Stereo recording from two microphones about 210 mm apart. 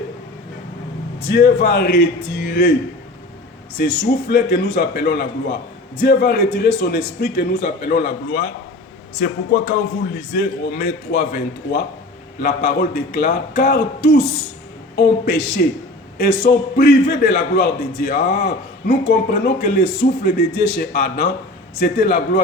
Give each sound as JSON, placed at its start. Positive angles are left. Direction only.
{"t": 1.3, "sound": "a man's voice", "side_deg": 50}
{"t": 3.8, "sound": "a man's voice", "side_deg": 50}